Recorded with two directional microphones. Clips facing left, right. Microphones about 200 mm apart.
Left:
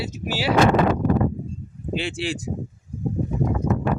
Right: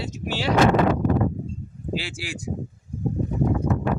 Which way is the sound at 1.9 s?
25° left (ahead or behind).